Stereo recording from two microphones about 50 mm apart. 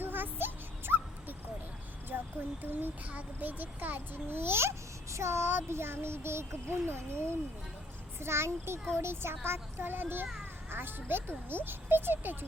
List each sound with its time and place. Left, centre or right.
0.0 s a sound: right
2.0 s a child's voice: right
5.1 s speech: right